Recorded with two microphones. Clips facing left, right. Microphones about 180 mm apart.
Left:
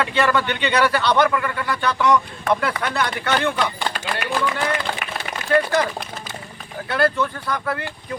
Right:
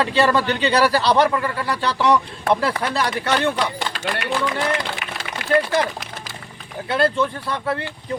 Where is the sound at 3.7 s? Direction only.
85° right.